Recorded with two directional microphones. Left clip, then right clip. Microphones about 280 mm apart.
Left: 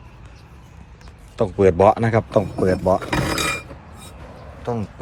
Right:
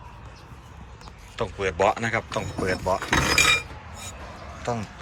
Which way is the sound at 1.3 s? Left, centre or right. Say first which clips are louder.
Left 9 dB; centre.